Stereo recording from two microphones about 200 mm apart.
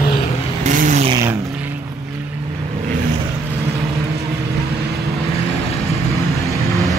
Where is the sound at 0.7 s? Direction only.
40° right (ahead or behind).